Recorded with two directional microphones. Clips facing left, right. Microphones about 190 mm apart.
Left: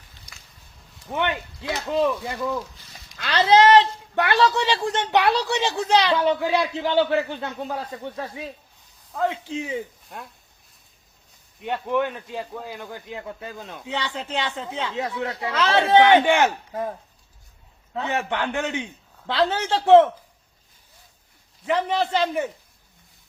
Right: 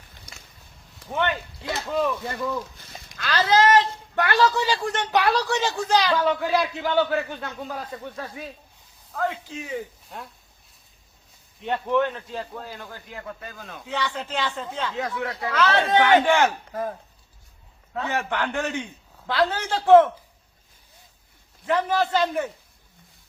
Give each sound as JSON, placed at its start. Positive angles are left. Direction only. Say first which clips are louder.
{"t": 1.9, "sound": "a man's voice", "louder": "left 3 dB", "side_deg": 25}
{"t": 2.7, "sound": "a sound", "louder": "right 4 dB", "side_deg": -55}
{"t": 3.2, "sound": "a man's voice", "louder": "left 3 dB", "side_deg": 25}
{"t": 11.6, "sound": "a man's voice", "louder": "right 1 dB", "side_deg": 10}
{"t": 17.9, "sound": "a man's voice", "louder": "left 1 dB", "side_deg": 20}
{"t": 21.7, "sound": "a man's voice", "louder": "even", "side_deg": 20}